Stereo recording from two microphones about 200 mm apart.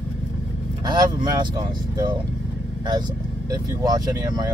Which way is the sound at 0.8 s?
20° right (ahead or behind).